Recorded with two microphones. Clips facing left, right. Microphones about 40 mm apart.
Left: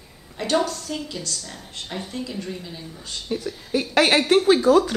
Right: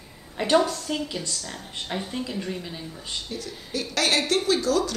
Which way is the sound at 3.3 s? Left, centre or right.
Left.